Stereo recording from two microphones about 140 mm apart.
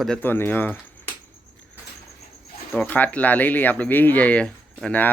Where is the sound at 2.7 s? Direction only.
10° left (ahead or behind).